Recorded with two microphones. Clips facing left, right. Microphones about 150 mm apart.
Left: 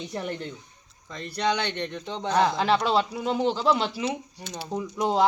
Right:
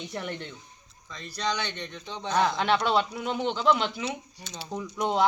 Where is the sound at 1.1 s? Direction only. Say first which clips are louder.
Left 5 dB; 60° left (ahead or behind).